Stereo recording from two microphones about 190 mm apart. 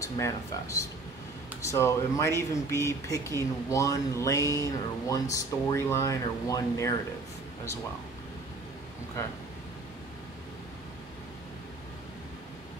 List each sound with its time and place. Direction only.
0.0 s speech: 15° left (ahead or behind)